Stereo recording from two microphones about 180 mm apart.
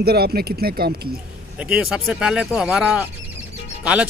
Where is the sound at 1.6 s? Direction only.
5° right (ahead or behind).